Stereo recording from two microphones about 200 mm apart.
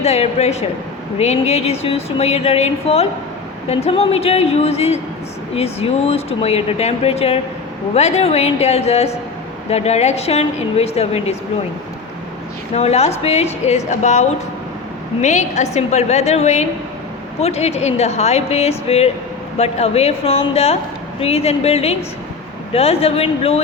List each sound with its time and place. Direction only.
0.0 s speech: 35° left (ahead or behind)
12.7 s speech: 30° left (ahead or behind)